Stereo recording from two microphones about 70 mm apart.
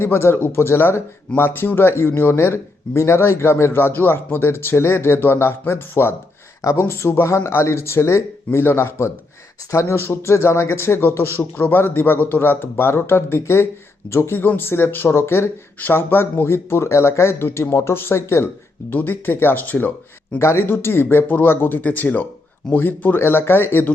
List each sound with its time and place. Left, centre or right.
0.0 s speech: left
6.6 s speech: left
20.4 s speech: left